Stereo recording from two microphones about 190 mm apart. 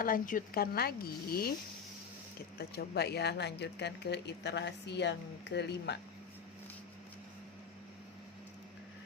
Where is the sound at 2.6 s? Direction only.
55° left (ahead or behind).